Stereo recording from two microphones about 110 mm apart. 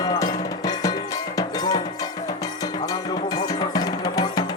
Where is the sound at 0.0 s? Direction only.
35° left (ahead or behind).